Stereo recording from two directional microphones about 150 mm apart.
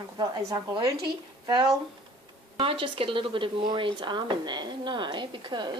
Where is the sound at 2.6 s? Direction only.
35° right (ahead or behind).